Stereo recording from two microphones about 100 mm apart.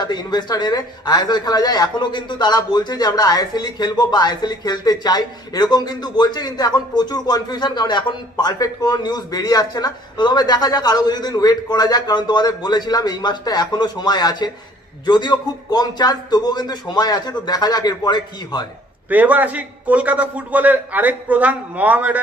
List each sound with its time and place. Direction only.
0.0 s speech: 45° left (ahead or behind)
19.0 s a man's voice: 15° right (ahead or behind)